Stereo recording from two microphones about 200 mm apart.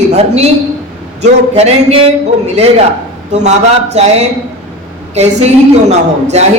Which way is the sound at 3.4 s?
35° right (ahead or behind).